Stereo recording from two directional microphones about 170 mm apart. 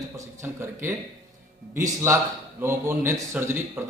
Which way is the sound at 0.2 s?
15° right (ahead or behind).